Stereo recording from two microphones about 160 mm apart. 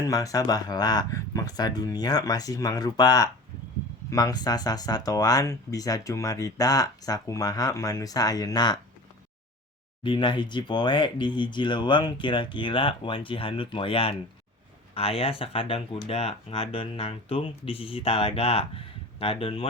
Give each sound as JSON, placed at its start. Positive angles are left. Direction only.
{"t": 0.1, "sound": "speech", "side_deg": 20}
{"t": 10.0, "sound": "speech", "side_deg": 30}